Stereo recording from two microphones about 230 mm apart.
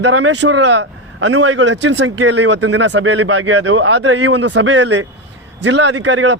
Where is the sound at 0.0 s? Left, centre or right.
Right.